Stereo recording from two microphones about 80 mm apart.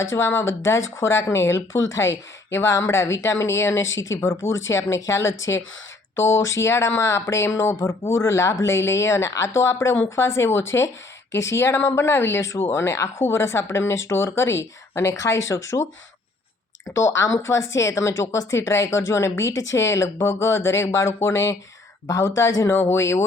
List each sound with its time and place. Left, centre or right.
0.0 s speech: left
16.9 s speech: left
22.7 s speech: left